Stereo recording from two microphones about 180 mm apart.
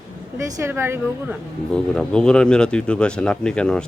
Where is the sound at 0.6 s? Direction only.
15° right (ahead or behind).